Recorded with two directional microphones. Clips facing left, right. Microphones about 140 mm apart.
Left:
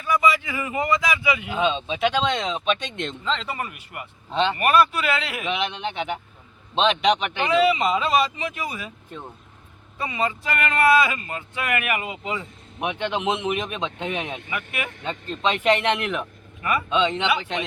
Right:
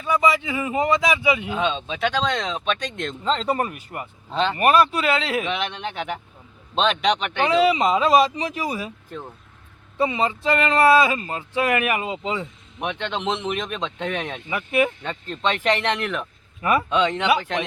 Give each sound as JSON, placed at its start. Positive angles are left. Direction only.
{"t": 0.0, "sound": "speech", "side_deg": -25}
{"t": 1.5, "sound": "speech", "side_deg": 0}
{"t": 2.7, "sound": "speech", "side_deg": -40}
{"t": 4.3, "sound": "speech", "side_deg": 0}
{"t": 4.5, "sound": "speech", "side_deg": -30}
{"t": 5.5, "sound": "speech", "side_deg": 0}
{"t": 7.4, "sound": "speech", "side_deg": -35}
{"t": 10.0, "sound": "speech", "side_deg": -25}
{"t": 12.8, "sound": "speech", "side_deg": 5}